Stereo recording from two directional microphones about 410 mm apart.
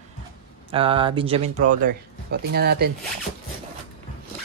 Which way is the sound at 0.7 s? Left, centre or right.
Centre.